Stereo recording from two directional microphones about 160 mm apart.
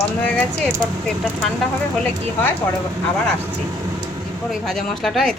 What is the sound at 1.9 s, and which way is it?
Speech, 10° left (ahead or behind).